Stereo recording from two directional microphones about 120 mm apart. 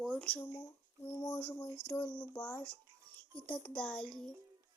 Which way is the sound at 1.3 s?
15° left (ahead or behind).